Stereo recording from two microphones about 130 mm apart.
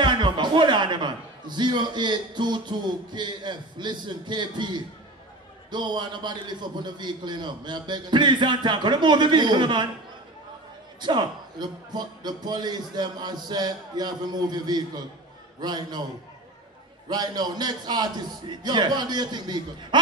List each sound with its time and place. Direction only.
0.0 s a man's voice: 35° right (ahead or behind)
11.0 s a man's voice: 35° right (ahead or behind)
17.1 s a man's voice: 30° right (ahead or behind)